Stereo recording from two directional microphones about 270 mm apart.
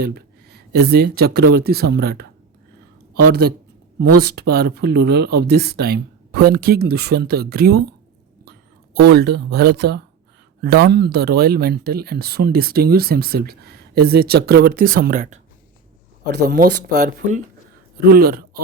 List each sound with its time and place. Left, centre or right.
0.0 s speech: right
3.2 s speech: right
9.0 s speech: right
16.4 s speech: right